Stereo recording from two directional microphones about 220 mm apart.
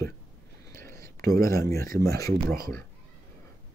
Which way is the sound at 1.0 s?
40° right (ahead or behind).